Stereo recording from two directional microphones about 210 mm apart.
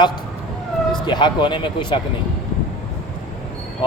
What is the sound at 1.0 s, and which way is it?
Speech, 20° left (ahead or behind).